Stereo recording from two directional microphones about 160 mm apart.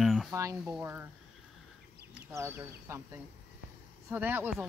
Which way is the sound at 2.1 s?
15° right (ahead or behind).